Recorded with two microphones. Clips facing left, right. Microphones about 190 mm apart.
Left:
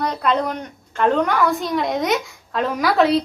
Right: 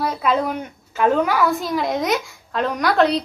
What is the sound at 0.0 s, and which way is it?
A woman's voice, 5° right (ahead or behind).